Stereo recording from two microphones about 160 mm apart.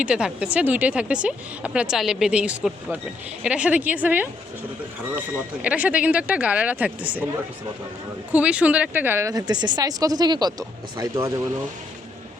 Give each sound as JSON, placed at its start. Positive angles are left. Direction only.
{"t": 0.0, "sound": "speech", "side_deg": -5}
{"t": 5.6, "sound": "speech", "side_deg": -10}
{"t": 8.3, "sound": "speech", "side_deg": -10}